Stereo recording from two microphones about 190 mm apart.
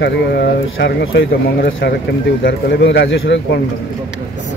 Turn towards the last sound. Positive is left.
turn(degrees=60)  # may be behind; listen again after turning